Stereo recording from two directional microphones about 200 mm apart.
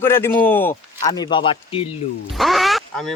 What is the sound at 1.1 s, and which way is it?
Speech, 20° left (ahead or behind).